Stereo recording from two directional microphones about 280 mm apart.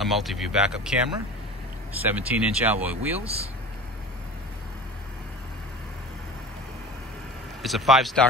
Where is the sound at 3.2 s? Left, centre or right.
Right.